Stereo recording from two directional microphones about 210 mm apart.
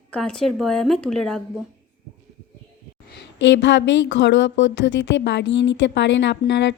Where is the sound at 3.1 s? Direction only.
55° left (ahead or behind).